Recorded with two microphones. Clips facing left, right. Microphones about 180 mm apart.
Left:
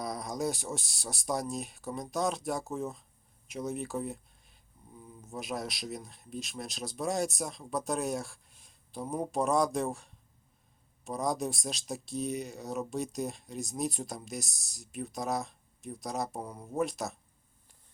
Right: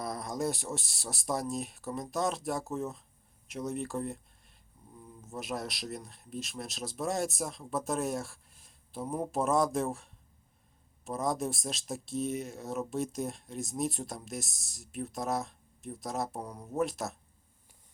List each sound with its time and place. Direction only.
0.0 s speech: centre (ahead or behind)